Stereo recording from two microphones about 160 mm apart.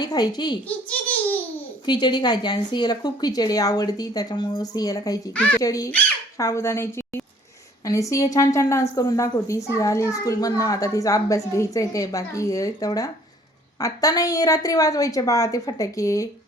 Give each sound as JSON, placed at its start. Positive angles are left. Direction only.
{"t": 0.0, "sound": "speech", "side_deg": 25}
{"t": 0.9, "sound": "babbling", "side_deg": 10}
{"t": 1.9, "sound": "speech", "side_deg": 25}
{"t": 5.3, "sound": "speech", "side_deg": 10}
{"t": 5.5, "sound": "a woman's voice", "side_deg": 20}